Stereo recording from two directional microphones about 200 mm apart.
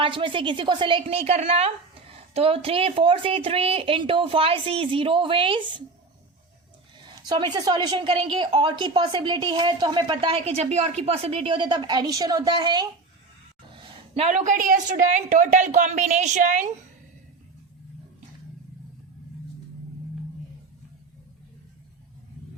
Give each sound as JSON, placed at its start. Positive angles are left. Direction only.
{"t": 0.0, "sound": "a woman's voice", "side_deg": -25}
{"t": 7.3, "sound": "a woman's voice", "side_deg": -20}